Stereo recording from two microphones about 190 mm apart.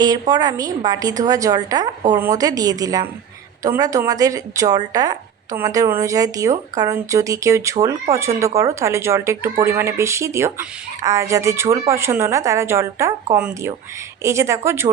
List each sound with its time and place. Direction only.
0.0 s a woman's voice: 20° right (ahead or behind)